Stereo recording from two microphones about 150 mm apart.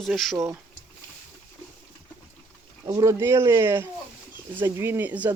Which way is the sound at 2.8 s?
20° right (ahead or behind).